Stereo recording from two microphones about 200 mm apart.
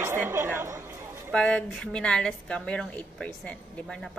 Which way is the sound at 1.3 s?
5° left (ahead or behind).